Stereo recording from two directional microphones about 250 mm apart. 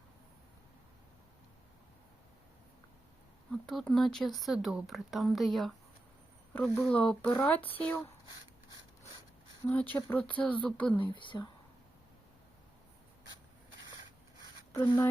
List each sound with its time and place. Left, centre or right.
3.5 s speech: centre
9.6 s speech: centre
11.1 s speech: centre
14.7 s speech: centre